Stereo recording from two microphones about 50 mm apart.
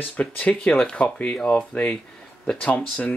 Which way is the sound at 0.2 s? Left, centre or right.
Left.